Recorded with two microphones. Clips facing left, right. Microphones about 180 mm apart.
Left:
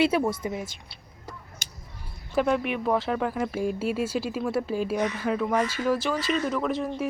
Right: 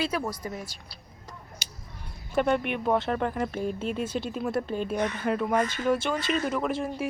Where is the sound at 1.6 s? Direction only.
50° left (ahead or behind).